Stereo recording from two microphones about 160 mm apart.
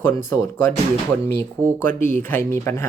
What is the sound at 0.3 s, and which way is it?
Speech, 20° left (ahead or behind).